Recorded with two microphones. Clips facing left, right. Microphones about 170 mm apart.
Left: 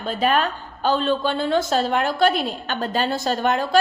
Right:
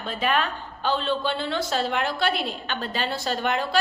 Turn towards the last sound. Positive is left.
turn(degrees=45)  # may be behind; listen again after turning